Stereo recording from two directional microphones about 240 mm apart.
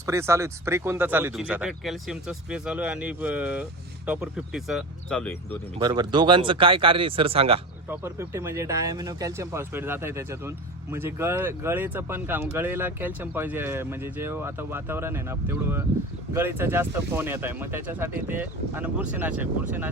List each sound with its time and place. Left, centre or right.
0.0 s speech: centre
5.8 s speech: centre
7.9 s speech: centre